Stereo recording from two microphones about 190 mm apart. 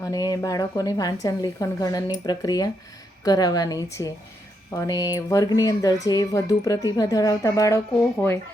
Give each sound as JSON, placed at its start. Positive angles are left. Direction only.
{"t": 0.0, "sound": "a woman's voice", "side_deg": 20}